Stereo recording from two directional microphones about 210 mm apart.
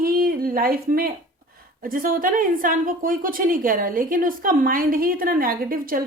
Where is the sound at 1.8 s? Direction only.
40° right (ahead or behind).